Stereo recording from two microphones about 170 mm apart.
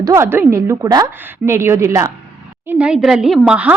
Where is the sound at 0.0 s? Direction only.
15° right (ahead or behind).